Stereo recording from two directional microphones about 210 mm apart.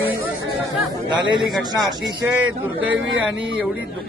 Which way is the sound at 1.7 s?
20° right (ahead or behind).